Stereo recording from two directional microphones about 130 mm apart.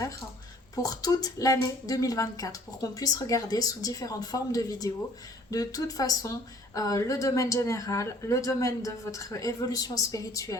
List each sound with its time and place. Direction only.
0.8 s speech: 30° left (ahead or behind)